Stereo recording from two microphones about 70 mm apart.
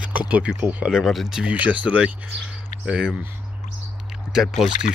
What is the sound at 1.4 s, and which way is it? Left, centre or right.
Speech, right.